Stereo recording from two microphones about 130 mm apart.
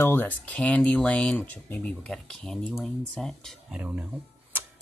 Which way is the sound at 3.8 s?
10° right (ahead or behind).